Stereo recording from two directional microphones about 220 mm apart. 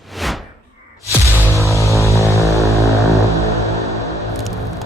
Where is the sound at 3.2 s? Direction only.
15° right (ahead or behind).